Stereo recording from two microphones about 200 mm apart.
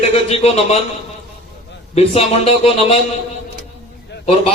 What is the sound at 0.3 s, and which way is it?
Speech, 30° left (ahead or behind).